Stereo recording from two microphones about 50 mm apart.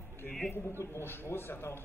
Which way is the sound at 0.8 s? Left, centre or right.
Left.